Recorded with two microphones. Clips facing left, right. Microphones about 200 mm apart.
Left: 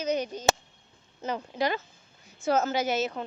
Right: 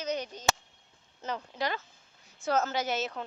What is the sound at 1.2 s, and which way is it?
A woman's voice, 15° left (ahead or behind).